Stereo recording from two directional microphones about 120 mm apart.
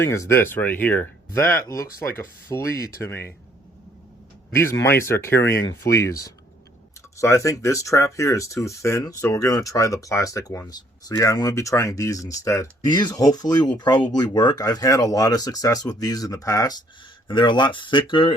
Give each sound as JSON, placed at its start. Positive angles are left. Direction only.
{"t": 0.0, "sound": "speech", "side_deg": 25}
{"t": 4.5, "sound": "speech", "side_deg": 25}